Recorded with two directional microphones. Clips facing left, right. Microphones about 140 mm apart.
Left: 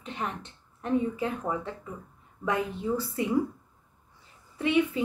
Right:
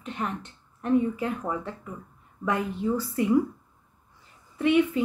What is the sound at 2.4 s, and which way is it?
Speech, 25° left (ahead or behind).